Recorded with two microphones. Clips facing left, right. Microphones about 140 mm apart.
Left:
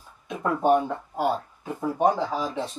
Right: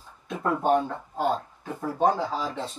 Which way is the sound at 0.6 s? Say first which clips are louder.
Left 4 dB; 10° left (ahead or behind).